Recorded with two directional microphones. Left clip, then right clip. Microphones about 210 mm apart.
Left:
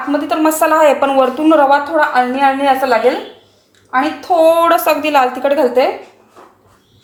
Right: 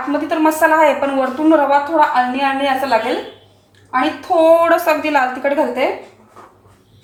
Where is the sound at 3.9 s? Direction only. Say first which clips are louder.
Left 2 dB; 30° left (ahead or behind).